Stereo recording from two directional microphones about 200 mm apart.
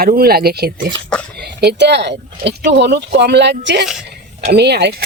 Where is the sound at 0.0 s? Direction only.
50° right (ahead or behind).